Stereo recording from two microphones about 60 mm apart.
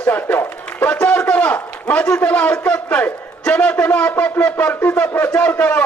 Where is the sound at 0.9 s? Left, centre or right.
Left.